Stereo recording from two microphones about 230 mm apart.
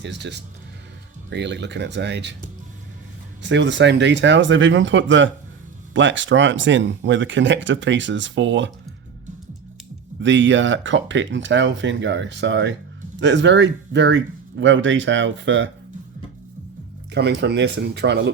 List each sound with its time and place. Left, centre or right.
0.0 s speech: right
3.4 s speech: right
10.2 s speech: right
17.2 s speech: right